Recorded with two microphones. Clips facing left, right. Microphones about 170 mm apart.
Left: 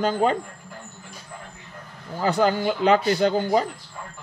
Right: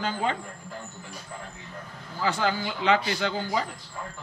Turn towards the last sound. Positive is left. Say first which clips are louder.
# left 8 dB
turn(degrees=40)  # may be behind; listen again after turning